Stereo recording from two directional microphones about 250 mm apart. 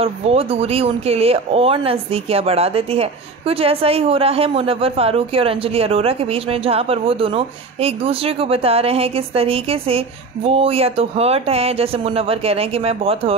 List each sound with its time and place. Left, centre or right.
0.0 s speech: right